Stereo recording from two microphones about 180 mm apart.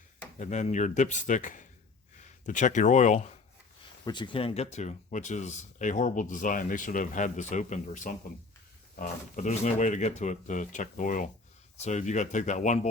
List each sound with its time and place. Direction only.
0.3 s speech: 40° left (ahead or behind)
4.0 s speech: 25° left (ahead or behind); by 12.9 s 40° left (ahead or behind)